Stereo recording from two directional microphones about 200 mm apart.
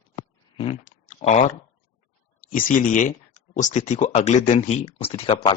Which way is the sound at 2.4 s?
40° left (ahead or behind).